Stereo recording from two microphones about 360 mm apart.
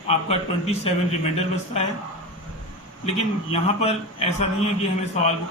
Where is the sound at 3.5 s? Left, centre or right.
Centre.